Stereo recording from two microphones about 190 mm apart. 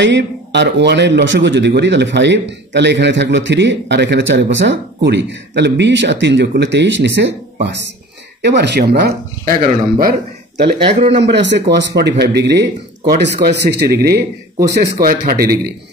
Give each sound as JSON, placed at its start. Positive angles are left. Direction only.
{"t": 0.0, "sound": "speech", "side_deg": -65}
{"t": 8.4, "sound": "speech", "side_deg": -60}
{"t": 9.4, "sound": "a man's voice", "side_deg": -45}
{"t": 11.3, "sound": "a man's voice", "side_deg": -65}